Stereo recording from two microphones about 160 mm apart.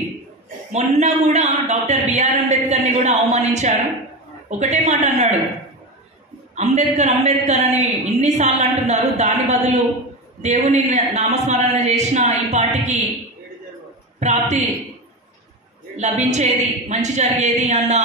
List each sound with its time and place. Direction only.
0.7 s a man's voice: 45° right (ahead or behind)
6.5 s a man's voice: 45° right (ahead or behind)
14.2 s a man's voice: 45° right (ahead or behind)
16.0 s a man's voice: 45° right (ahead or behind)